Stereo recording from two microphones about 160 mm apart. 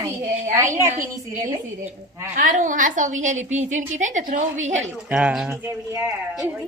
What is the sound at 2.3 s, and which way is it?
A woman's voice, 55° right (ahead or behind).